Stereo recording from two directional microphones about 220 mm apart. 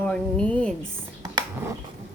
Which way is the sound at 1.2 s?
20° right (ahead or behind).